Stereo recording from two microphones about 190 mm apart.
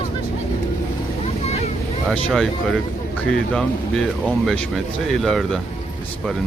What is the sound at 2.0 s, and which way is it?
Speech, centre (ahead or behind).